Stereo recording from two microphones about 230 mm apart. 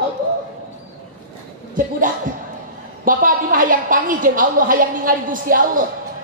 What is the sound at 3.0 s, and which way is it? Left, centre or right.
Speech, right.